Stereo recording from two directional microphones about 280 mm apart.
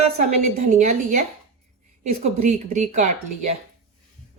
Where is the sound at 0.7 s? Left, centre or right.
Right.